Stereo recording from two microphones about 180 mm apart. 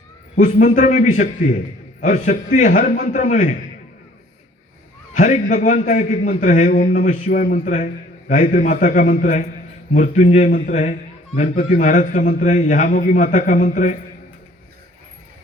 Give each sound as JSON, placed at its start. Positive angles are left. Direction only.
{"t": 0.3, "sound": "a man's voice", "side_deg": 45}
{"t": 5.1, "sound": "a man's voice", "side_deg": 40}